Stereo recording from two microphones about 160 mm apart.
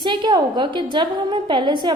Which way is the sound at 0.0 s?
30° right (ahead or behind).